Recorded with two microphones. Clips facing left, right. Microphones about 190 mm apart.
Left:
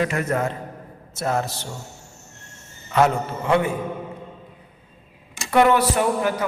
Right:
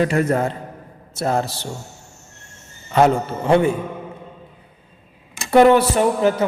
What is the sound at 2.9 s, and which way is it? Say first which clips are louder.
Speech: right 4 dB; 30° right (ahead or behind).